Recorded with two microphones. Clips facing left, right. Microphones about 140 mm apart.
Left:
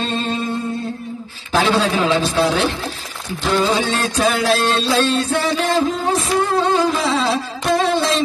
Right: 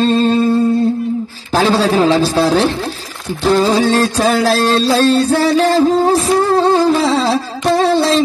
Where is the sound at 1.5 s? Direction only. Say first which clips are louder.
Right 4 dB; 35° right (ahead or behind).